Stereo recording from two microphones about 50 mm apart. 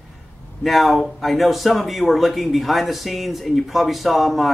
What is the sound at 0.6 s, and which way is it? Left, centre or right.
Speech, centre.